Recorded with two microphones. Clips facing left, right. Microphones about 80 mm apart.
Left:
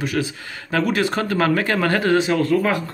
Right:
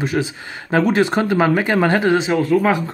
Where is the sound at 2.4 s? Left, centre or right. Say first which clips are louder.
Right 2 dB; centre.